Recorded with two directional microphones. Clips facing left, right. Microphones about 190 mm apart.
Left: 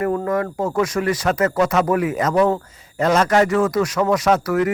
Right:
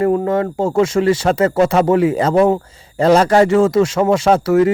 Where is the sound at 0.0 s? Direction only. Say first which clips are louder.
Right 5 dB; 25° right (ahead or behind).